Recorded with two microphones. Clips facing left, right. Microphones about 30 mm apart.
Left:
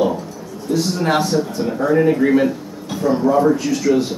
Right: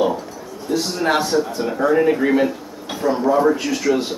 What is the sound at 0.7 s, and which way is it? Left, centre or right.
A man's voice, centre.